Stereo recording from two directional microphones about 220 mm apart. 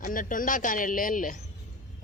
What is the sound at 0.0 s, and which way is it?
A man's voice, 40° left (ahead or behind).